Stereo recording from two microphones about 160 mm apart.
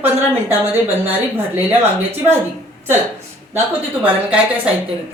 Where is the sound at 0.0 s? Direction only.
15° right (ahead or behind).